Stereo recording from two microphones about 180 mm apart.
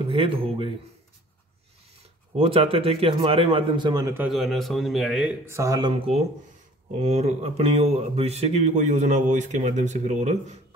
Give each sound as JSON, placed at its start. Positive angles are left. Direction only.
{"t": 0.0, "sound": "speech", "side_deg": -30}
{"t": 2.3, "sound": "speech", "side_deg": -30}
{"t": 4.3, "sound": "a man's voice", "side_deg": 0}
{"t": 5.4, "sound": "speech", "side_deg": -15}
{"t": 7.0, "sound": "speech", "side_deg": -35}